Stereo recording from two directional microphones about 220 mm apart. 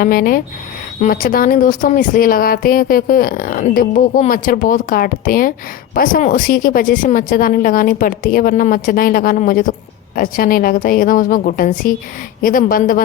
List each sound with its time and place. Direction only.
0.0 s speech: 40° left (ahead or behind)